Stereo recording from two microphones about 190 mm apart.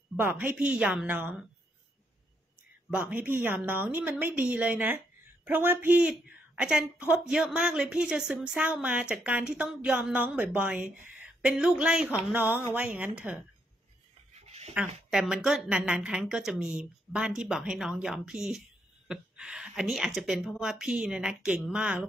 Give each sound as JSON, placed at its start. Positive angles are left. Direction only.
{"t": 0.2, "sound": "a woman's voice", "side_deg": -10}
{"t": 2.9, "sound": "a woman's voice", "side_deg": -5}
{"t": 14.3, "sound": "a sound", "side_deg": -35}
{"t": 15.0, "sound": "a woman's voice", "side_deg": -5}